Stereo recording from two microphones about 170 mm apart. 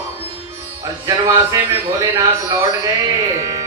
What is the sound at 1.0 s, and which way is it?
A man's voice, 20° right (ahead or behind).